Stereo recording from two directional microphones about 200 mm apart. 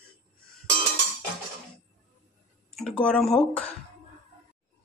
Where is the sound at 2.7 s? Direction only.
5° left (ahead or behind).